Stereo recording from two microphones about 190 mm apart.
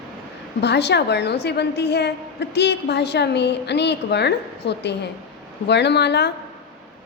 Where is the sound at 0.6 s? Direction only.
65° left (ahead or behind).